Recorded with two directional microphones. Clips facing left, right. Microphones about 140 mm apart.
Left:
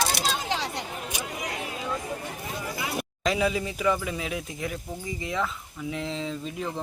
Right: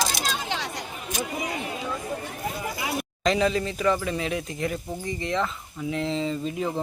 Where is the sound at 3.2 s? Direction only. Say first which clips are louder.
Right 3 dB; 10° left (ahead or behind).